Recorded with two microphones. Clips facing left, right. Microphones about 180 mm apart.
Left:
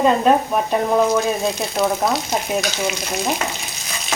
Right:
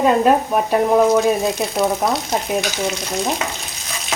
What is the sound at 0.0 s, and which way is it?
Speech, 5° right (ahead or behind).